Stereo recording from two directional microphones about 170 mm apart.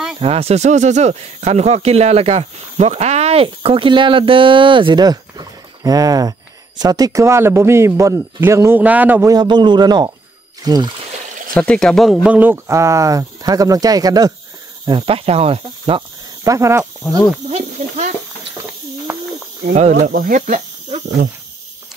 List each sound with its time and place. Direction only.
0.2 s speech: 35° right (ahead or behind); by 9.3 s 10° right (ahead or behind)
9.3 s a man's voice: 25° right (ahead or behind)
11.5 s speech: 5° left (ahead or behind); by 16.0 s 35° right (ahead or behind)
16.4 s speech: 15° right (ahead or behind)
17.5 s speech: 40° right (ahead or behind)
19.1 s a sound: 15° right (ahead or behind)
19.7 s speech: 40° right (ahead or behind)
20.1 s speech: 55° right (ahead or behind)